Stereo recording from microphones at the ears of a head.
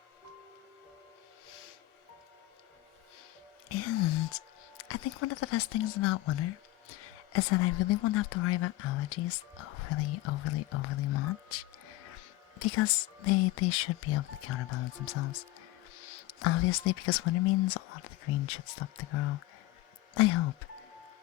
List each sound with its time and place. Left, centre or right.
3.7 s speech: left